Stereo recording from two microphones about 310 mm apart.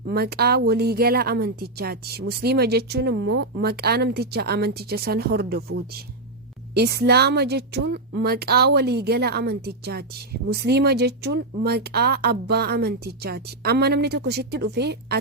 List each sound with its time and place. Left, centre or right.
0.0 s a woman's voice: right